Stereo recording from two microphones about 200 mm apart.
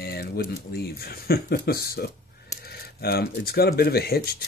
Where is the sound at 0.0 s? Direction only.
50° left (ahead or behind).